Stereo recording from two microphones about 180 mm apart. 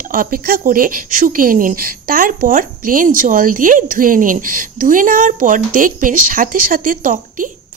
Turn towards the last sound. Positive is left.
turn(degrees=-50)  # may be behind; listen again after turning